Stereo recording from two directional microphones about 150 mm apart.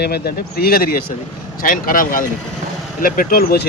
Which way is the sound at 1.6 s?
65° left (ahead or behind).